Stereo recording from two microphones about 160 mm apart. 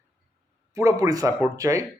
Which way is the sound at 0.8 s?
20° right (ahead or behind).